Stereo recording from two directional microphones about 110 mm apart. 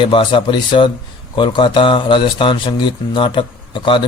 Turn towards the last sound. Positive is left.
turn(degrees=50)  # may be behind; listen again after turning